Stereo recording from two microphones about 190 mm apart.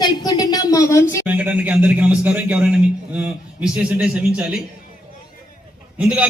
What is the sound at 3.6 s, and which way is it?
Speech, 5° right (ahead or behind).